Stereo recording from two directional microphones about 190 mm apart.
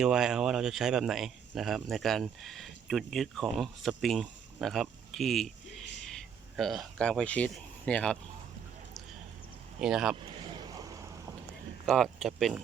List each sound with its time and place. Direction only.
0.0 s speech: 5° right (ahead or behind)
9.8 s speech: centre (ahead or behind)
10.4 s boat: 25° right (ahead or behind)
11.9 s speech: centre (ahead or behind)